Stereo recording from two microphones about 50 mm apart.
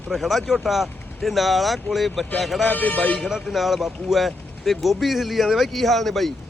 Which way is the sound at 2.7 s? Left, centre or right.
Left.